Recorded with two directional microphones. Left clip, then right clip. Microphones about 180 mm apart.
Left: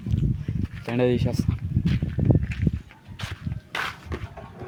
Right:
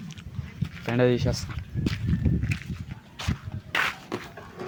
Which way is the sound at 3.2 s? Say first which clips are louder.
Right 2 dB; 40° right (ahead or behind).